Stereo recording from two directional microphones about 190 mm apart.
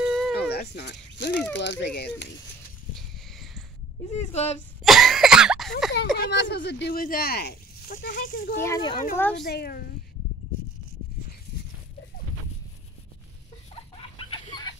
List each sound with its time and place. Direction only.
0.0 s a sound: centre (ahead or behind)
0.4 s snake: 60° left (ahead or behind)
1.6 s speech: 65° left (ahead or behind)
3.3 s a sound: centre (ahead or behind)
4.1 s speech: 35° left (ahead or behind)
4.8 s cough: centre (ahead or behind)
6.1 s speech: 60° left (ahead or behind)
8.5 s speech: 15° left (ahead or behind)
9.1 s speech: 10° left (ahead or behind)
9.4 s speech: 55° left (ahead or behind)
14.1 s chicken: 25° left (ahead or behind)